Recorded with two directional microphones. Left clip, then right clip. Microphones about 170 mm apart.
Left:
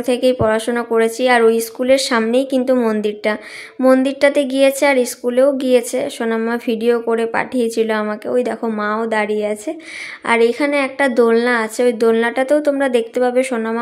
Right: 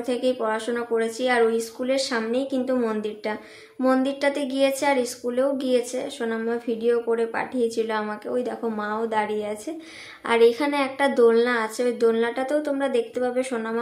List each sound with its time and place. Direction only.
0.0 s speech: 40° left (ahead or behind)